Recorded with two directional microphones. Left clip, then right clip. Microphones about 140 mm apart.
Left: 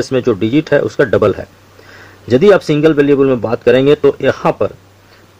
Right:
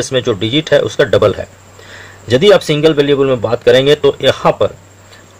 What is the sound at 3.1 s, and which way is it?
Speech, 25° left (ahead or behind).